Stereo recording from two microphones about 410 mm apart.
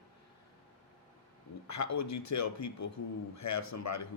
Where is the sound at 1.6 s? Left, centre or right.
Left.